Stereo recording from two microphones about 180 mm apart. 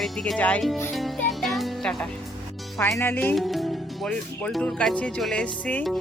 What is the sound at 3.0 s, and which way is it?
Speech, 10° left (ahead or behind).